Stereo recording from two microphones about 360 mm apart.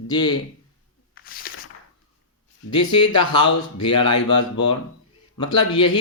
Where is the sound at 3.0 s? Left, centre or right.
Left.